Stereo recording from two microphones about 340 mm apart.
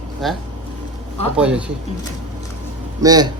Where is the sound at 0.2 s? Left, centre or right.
Centre.